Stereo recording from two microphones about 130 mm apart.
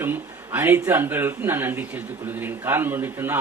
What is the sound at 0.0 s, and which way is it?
A man's voice, 15° right (ahead or behind).